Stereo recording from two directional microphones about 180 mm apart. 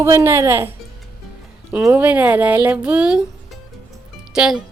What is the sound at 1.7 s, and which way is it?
Speech, 10° right (ahead or behind).